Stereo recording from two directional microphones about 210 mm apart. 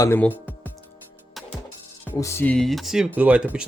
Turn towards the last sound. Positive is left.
turn(degrees=-5)  # may be behind; listen again after turning